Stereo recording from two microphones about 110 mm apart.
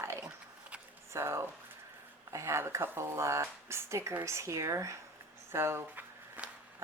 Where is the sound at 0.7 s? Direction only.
10° right (ahead or behind).